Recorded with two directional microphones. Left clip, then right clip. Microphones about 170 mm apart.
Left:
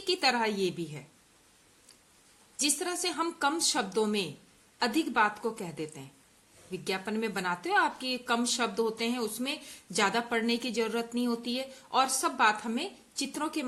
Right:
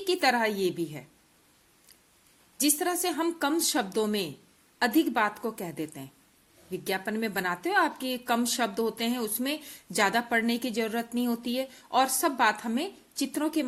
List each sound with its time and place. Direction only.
0.0 s a woman's voice: 30° right (ahead or behind)
2.6 s a woman's voice: 35° right (ahead or behind)